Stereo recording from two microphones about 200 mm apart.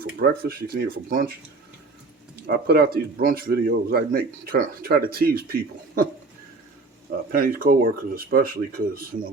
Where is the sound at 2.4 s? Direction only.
50° right (ahead or behind).